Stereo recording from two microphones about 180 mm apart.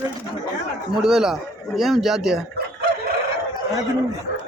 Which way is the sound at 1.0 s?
5° right (ahead or behind).